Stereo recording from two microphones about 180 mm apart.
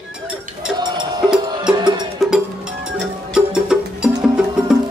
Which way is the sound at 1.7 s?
25° right (ahead or behind).